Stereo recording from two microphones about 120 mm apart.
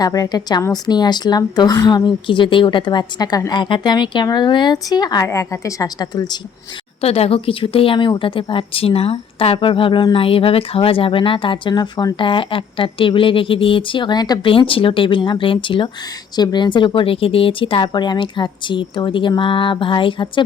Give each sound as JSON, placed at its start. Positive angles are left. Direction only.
{"t": 0.0, "sound": "a woman's voice", "side_deg": 35}
{"t": 7.0, "sound": "a woman's voice", "side_deg": 55}